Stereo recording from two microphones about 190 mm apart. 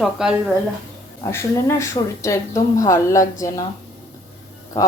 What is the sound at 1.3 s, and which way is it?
A woman's voice, 15° left (ahead or behind).